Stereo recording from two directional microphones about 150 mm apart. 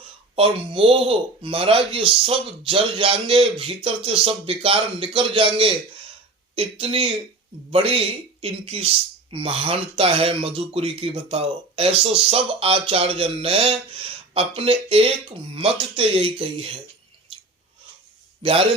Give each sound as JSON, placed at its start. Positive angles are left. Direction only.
{"t": 0.3, "sound": "speech", "side_deg": -40}
{"t": 18.4, "sound": "speech", "side_deg": -40}